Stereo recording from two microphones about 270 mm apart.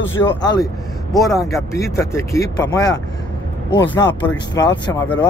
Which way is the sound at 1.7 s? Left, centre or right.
Centre.